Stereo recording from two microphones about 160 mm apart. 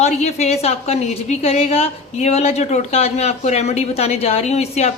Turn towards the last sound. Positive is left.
turn(degrees=40)  # may be behind; listen again after turning